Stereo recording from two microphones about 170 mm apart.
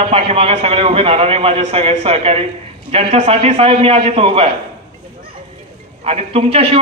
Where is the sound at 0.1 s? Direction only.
35° right (ahead or behind).